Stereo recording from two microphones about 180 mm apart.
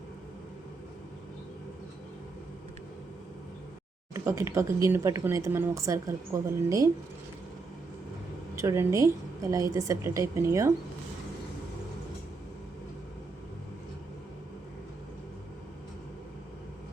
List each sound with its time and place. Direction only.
4.1 s speech: 15° right (ahead or behind)
8.5 s speech: 15° right (ahead or behind)